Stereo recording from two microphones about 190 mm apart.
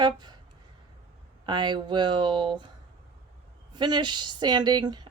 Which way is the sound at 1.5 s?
25° right (ahead or behind).